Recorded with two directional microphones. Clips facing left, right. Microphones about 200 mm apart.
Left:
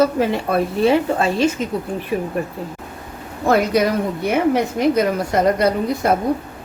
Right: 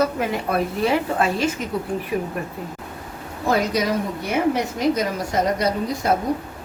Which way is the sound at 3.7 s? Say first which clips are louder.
Left 4 dB; 60° left (ahead or behind).